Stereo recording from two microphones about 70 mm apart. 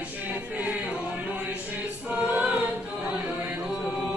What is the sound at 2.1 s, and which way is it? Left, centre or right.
Choir, right.